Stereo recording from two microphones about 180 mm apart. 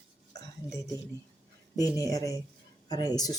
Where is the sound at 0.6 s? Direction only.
10° right (ahead or behind).